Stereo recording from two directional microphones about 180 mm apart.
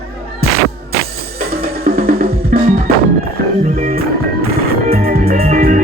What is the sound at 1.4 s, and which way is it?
Music, 55° right (ahead or behind).